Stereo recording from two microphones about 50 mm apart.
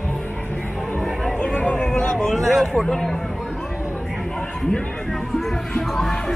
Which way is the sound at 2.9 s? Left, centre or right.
Centre.